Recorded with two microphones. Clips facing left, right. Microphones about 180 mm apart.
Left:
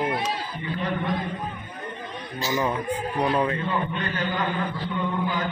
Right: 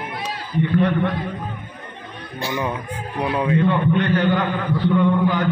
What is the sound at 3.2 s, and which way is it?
Speech, 5° right (ahead or behind).